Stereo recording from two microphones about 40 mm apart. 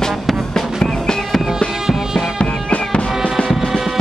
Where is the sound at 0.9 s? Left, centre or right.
Centre.